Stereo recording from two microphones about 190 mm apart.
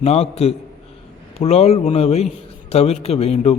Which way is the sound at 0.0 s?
35° left (ahead or behind).